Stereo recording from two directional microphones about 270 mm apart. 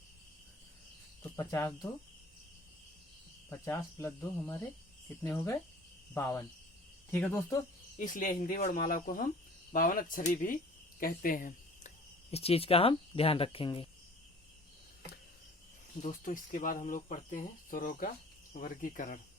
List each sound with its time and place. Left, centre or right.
1.2 s speech: centre
3.5 s speech: centre
7.9 s speech: left
16.0 s speech: left